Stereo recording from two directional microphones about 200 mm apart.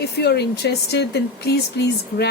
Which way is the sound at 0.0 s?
55° left (ahead or behind).